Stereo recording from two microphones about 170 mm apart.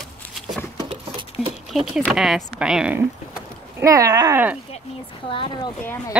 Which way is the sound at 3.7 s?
20° right (ahead or behind).